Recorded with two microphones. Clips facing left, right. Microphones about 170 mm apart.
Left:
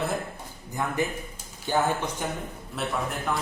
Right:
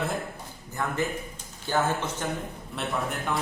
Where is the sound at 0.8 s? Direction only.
15° left (ahead or behind).